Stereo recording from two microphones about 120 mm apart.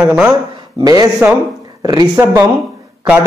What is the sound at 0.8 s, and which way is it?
Speech, 30° right (ahead or behind).